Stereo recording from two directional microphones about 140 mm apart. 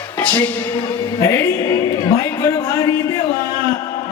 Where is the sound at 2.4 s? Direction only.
25° left (ahead or behind).